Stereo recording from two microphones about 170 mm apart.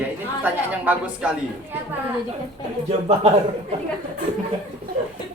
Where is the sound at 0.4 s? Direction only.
10° right (ahead or behind).